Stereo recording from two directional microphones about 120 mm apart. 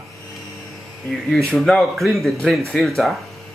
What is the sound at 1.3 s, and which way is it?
Speech, centre (ahead or behind).